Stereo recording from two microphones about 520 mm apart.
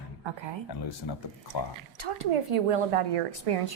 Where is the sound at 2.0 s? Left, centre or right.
Right.